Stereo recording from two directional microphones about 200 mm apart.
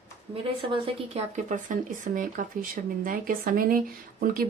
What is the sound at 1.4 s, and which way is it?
Speech, 40° right (ahead or behind).